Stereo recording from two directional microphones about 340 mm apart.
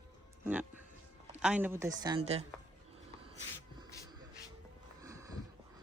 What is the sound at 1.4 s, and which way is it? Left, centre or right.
A woman's voice, centre.